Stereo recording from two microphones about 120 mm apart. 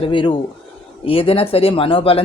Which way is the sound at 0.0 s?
45° left (ahead or behind).